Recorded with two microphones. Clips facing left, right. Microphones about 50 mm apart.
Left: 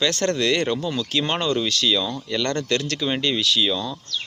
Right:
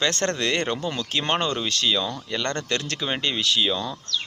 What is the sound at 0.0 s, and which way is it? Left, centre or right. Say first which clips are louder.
Speech: left 2 dB; right.